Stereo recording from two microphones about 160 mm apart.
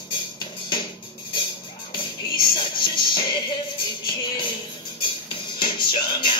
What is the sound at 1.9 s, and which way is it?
Music, 30° left (ahead or behind).